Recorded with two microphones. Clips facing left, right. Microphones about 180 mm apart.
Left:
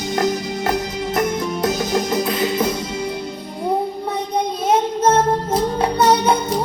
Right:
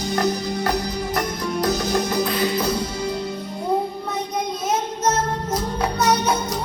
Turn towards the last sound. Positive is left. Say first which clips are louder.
# left 5 dB
turn(degrees=30)  # may be behind; listen again after turning